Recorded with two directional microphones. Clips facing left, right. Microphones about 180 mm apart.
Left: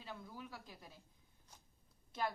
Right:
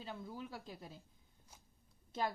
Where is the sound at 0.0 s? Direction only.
30° right (ahead or behind).